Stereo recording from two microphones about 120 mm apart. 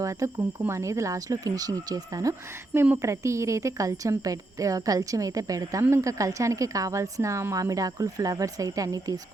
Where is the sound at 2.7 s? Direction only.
20° right (ahead or behind).